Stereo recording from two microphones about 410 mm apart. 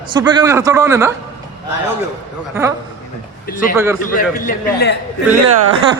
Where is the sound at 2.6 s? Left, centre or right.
Centre.